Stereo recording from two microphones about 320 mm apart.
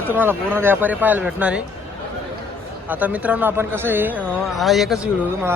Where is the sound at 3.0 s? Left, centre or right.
Centre.